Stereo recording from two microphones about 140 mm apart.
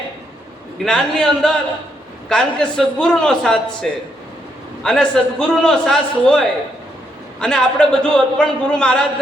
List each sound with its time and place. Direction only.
0.9 s a man's voice: 5° left (ahead or behind)